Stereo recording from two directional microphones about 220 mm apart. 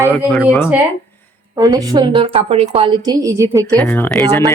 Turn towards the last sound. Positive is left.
turn(degrees=10)  # may be behind; listen again after turning